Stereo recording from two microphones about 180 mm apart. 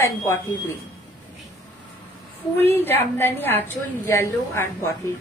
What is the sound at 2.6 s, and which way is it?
A woman's voice, 10° left (ahead or behind).